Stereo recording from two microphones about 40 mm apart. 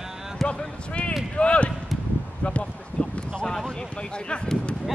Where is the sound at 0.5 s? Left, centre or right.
Left.